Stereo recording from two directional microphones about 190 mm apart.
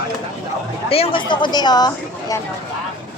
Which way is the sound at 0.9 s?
30° left (ahead or behind).